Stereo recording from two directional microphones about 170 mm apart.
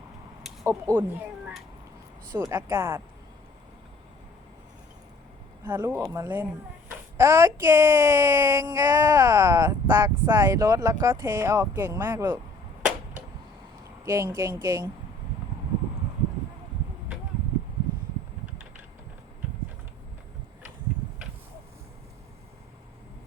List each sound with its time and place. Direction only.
0.6 s speech: 15° right (ahead or behind)
5.6 s speech: 10° right (ahead or behind)
14.0 s speech: 15° right (ahead or behind)